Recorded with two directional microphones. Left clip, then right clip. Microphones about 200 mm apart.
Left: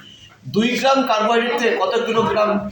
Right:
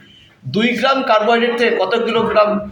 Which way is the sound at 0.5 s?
50° right (ahead or behind).